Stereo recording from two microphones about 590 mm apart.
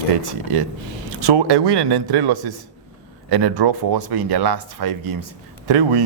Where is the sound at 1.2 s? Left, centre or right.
Right.